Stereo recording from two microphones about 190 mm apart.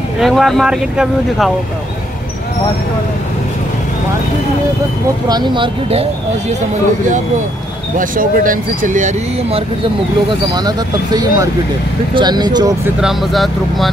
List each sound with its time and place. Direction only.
0.2 s speech: centre (ahead or behind)
5.3 s speech: 25° right (ahead or behind)
8.0 s speech: 45° right (ahead or behind)
10.5 s speech: 20° right (ahead or behind)
13.0 s speech: centre (ahead or behind)